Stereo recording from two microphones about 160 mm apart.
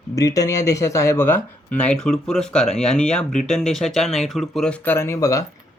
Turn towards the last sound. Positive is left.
turn(degrees=20)  # may be behind; listen again after turning